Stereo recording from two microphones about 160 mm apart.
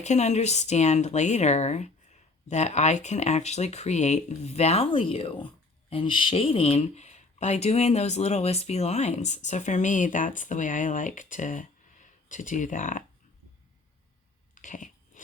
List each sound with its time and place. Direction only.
0.0 s speech: 45° left (ahead or behind)
14.5 s dog: 50° left (ahead or behind)